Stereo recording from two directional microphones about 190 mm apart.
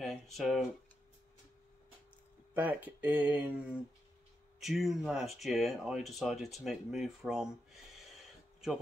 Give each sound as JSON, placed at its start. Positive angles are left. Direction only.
{"t": 0.0, "sound": "a sound", "side_deg": 0}
{"t": 2.5, "sound": "speech", "side_deg": -10}
{"t": 4.6, "sound": "speech", "side_deg": 0}